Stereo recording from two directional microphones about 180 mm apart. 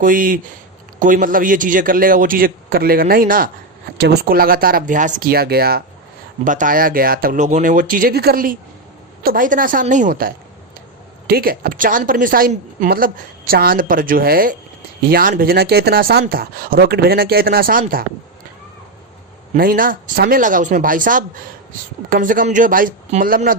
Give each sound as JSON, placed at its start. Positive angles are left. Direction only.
{"t": 0.0, "sound": "a woman's voice", "side_deg": -50}
{"t": 3.9, "sound": "speech", "side_deg": -65}
{"t": 6.4, "sound": "a woman's voice", "side_deg": -45}
{"t": 19.5, "sound": "a woman's voice", "side_deg": -50}